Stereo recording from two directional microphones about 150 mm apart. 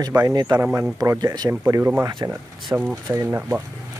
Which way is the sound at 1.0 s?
25° right (ahead or behind).